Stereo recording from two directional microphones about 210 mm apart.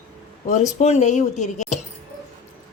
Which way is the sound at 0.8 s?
35° left (ahead or behind).